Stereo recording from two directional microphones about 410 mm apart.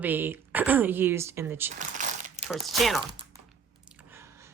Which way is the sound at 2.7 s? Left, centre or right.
Centre.